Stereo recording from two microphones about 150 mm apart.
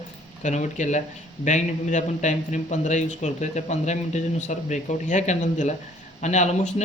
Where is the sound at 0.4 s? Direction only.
55° left (ahead or behind).